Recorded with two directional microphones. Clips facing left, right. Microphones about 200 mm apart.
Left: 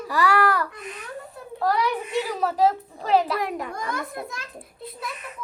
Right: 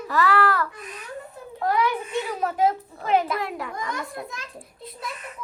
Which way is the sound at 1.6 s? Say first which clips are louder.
Even; 35° left (ahead or behind).